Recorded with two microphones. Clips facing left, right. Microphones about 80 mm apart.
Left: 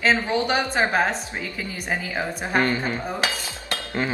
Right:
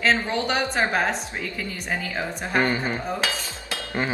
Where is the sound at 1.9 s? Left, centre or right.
Centre.